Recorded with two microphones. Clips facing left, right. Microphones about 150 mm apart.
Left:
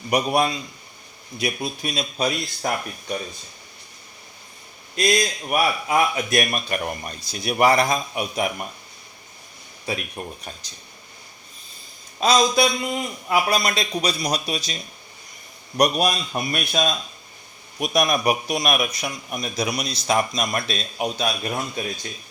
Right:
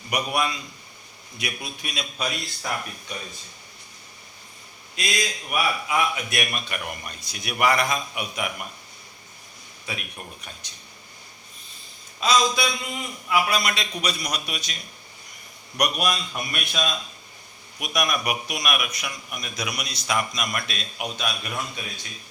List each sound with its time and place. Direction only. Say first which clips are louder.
0.1 s a man's voice: left 5 dB; 30° left (ahead or behind)
4.9 s a man's voice: left 7 dB; 40° left (ahead or behind)
9.9 s a man's voice: left 7 dB; 35° left (ahead or behind)
12.2 s a man's voice: left 4 dB; 40° left (ahead or behind)
15.8 s a man's voice: left 5 dB; 35° left (ahead or behind)